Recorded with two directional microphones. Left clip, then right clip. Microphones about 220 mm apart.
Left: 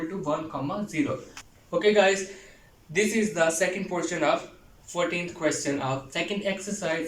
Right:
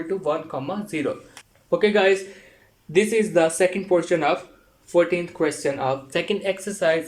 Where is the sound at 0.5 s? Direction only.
50° right (ahead or behind).